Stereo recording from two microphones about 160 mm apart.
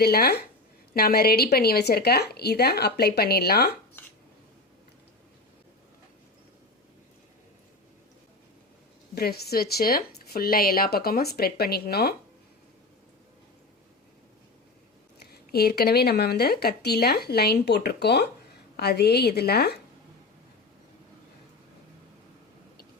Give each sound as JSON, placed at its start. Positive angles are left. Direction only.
{"t": 0.0, "sound": "speech", "side_deg": 75}
{"t": 9.1, "sound": "speech", "side_deg": 75}
{"t": 15.5, "sound": "a woman's voice", "side_deg": 80}